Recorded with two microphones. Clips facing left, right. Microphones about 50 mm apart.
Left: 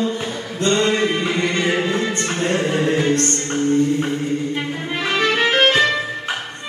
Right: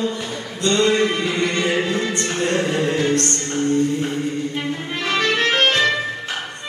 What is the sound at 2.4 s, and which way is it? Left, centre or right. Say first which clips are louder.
Singing: left 1 dB; left.